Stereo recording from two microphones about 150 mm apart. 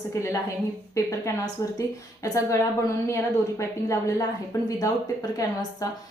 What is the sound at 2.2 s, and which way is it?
A woman's voice, 20° left (ahead or behind).